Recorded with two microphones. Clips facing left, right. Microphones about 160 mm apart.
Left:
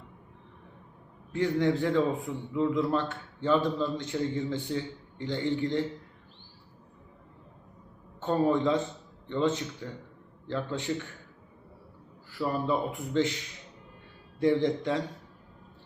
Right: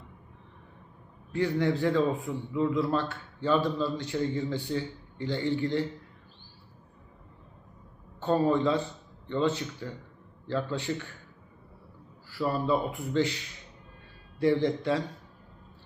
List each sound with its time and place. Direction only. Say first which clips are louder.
1.3 s a man's voice: left 1 dB; 20° left (ahead or behind)
8.2 s a man's voice: right 1 dB; 15° left (ahead or behind)
12.3 s a man's voice: right 1 dB; 20° left (ahead or behind)